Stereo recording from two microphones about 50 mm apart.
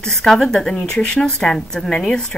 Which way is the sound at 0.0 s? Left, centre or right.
Centre.